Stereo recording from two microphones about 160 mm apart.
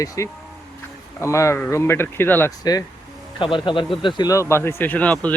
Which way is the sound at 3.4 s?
30° left (ahead or behind).